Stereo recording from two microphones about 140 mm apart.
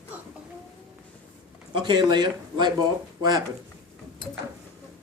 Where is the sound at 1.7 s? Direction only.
35° right (ahead or behind).